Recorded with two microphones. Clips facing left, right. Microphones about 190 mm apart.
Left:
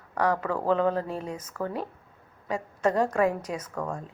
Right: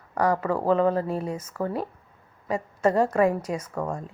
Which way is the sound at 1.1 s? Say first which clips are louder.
Right 5 dB; 40° right (ahead or behind).